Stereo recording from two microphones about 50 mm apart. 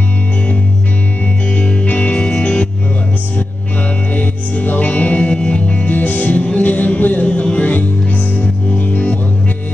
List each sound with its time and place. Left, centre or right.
1.9 s music: left
4.1 s music: left
5.9 s music: left